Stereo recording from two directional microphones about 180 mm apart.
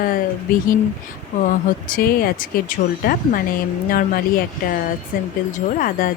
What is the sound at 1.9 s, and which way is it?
Speech, 55° left (ahead or behind).